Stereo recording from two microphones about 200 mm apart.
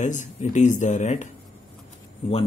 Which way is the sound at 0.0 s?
40° left (ahead or behind).